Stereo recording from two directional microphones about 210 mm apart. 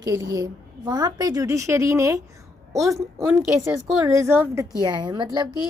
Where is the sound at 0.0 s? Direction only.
15° right (ahead or behind).